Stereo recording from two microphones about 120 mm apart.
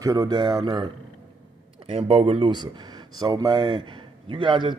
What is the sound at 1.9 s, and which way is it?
Speech, 55° right (ahead or behind).